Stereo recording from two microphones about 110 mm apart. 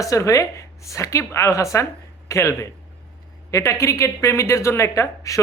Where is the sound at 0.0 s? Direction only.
30° left (ahead or behind).